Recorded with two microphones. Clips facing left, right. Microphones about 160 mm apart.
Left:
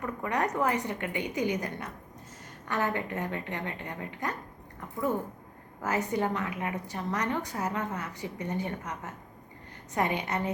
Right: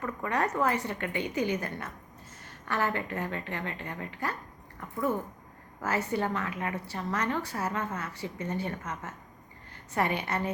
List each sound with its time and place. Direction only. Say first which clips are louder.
0.0 s a woman's voice: even; 15° left (ahead or behind)
5.8 s a woman's voice: left 1 dB; 20° left (ahead or behind)